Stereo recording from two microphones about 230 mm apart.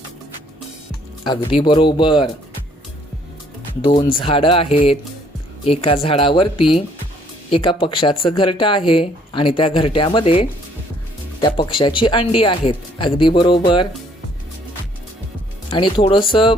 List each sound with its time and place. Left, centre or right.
1.2 s speech: left
3.8 s speech: left
7.5 s speech: left
15.7 s speech: left